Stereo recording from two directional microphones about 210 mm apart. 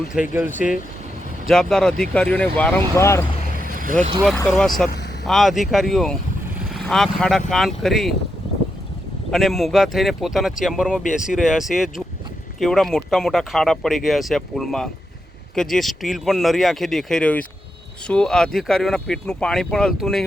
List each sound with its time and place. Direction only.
0.1 s speech: 5° right (ahead or behind); by 3.2 s 15° left (ahead or behind)
3.7 s vehicle: 40° right (ahead or behind)
4.4 s speech: centre (ahead or behind)
9.3 s speech: centre (ahead or behind)